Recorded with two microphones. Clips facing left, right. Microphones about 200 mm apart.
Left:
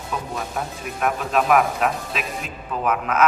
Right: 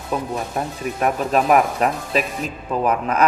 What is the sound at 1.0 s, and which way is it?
Speech, 40° right (ahead or behind).